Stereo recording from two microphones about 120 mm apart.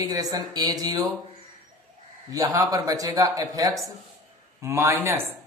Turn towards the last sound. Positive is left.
turn(degrees=-20)  # may be behind; listen again after turning